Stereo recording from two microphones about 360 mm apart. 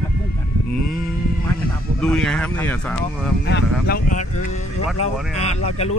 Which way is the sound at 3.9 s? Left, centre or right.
Left.